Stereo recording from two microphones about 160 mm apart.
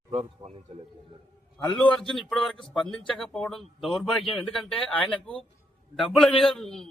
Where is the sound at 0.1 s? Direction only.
40° right (ahead or behind).